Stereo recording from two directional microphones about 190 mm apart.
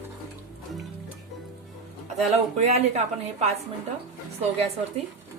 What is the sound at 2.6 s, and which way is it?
Speech, 35° right (ahead or behind).